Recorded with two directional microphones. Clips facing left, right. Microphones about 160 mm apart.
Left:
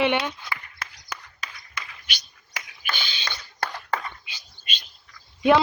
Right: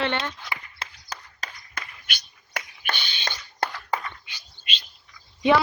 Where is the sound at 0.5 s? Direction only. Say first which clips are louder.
Even; 30° right (ahead or behind).